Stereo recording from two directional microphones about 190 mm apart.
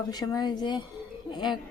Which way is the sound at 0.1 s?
20° left (ahead or behind).